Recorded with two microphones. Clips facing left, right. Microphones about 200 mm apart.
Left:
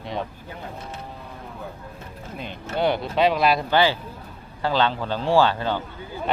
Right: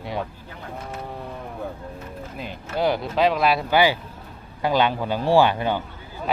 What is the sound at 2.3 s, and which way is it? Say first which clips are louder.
Speech: left 1 dB; 5° right (ahead or behind).